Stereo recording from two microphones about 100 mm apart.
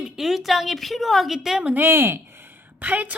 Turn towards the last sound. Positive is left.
turn(degrees=-15)  # may be behind; listen again after turning